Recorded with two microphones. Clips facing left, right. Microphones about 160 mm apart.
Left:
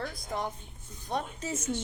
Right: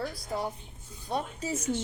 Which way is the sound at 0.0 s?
35° right (ahead or behind).